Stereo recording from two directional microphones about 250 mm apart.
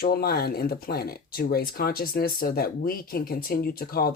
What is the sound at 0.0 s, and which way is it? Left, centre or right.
Speech, left.